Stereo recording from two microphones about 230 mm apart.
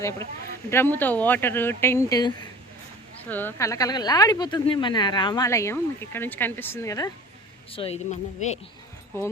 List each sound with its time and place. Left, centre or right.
0.7 s speech: centre
7.7 s speech: left